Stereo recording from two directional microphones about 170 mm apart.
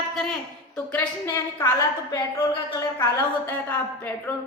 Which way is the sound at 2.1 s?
20° left (ahead or behind).